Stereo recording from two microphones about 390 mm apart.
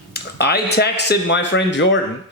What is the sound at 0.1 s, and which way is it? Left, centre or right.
Speech, left.